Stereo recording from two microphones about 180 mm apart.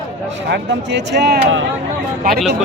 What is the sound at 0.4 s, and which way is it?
Speech, 70° right (ahead or behind).